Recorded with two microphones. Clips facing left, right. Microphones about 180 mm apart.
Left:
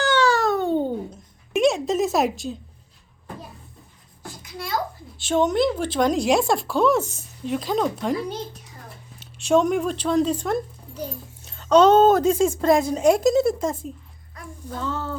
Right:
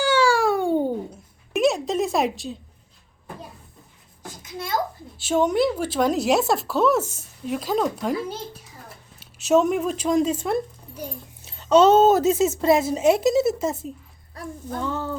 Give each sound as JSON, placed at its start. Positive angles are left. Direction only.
{"t": 0.0, "sound": "babbling", "side_deg": -10}
{"t": 4.2, "sound": "a sound", "side_deg": -20}
{"t": 5.1, "sound": "speech", "side_deg": -10}
{"t": 9.4, "sound": "speech", "side_deg": -5}